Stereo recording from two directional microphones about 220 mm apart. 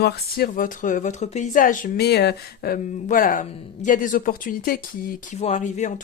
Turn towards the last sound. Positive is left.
turn(degrees=35)  # may be behind; listen again after turning